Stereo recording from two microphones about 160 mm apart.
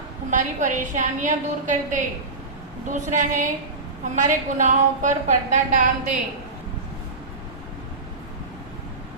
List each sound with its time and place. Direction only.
0.3 s a woman's voice: 50° right (ahead or behind)